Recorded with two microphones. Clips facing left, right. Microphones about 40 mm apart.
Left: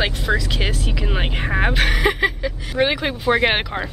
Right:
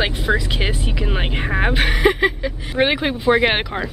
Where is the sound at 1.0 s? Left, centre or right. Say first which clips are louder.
Right 1 dB; centre.